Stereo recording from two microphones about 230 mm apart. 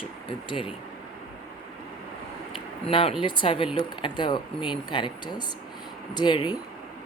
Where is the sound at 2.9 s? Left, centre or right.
Left.